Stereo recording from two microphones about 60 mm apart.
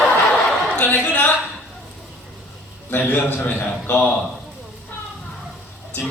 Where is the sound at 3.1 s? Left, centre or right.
Left.